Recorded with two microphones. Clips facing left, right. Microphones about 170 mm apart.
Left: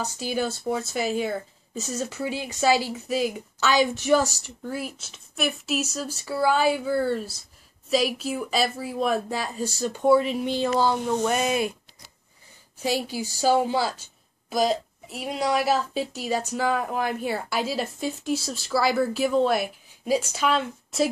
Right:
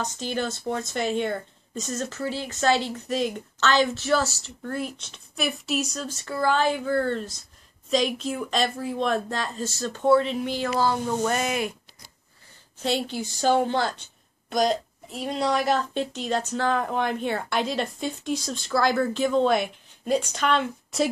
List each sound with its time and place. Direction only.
0.0 s speech: 10° left (ahead or behind)
11.4 s speech: 25° left (ahead or behind)
12.7 s a woman's voice: 10° left (ahead or behind)